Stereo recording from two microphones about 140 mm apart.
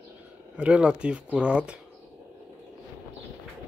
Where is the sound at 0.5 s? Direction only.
10° right (ahead or behind).